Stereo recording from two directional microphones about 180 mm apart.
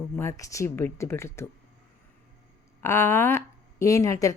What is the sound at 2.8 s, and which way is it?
Speech, 15° left (ahead or behind).